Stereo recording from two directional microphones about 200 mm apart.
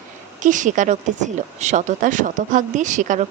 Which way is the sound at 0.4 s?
40° right (ahead or behind).